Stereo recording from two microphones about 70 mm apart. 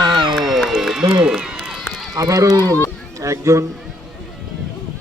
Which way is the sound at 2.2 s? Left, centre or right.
Right.